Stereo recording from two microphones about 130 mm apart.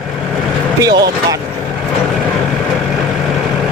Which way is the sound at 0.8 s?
25° right (ahead or behind).